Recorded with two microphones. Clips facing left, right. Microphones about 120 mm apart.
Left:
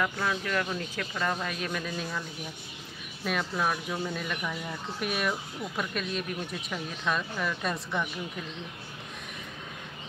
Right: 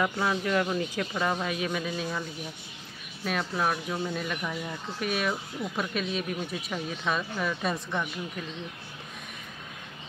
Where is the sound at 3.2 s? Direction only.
Centre (ahead or behind).